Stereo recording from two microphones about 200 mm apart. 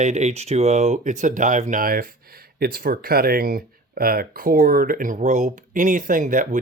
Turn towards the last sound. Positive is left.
turn(degrees=-40)  # may be behind; listen again after turning